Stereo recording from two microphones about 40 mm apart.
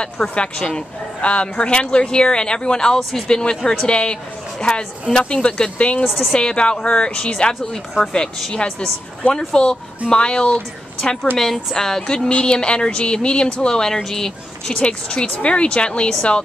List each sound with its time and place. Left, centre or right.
0.3 s speech: left
3.0 s speech: centre
3.3 s a woman's voice: left
9.2 s speech: left
11.3 s speech: centre
12.3 s speech: left; by 14.3 s centre
14.7 s speech: left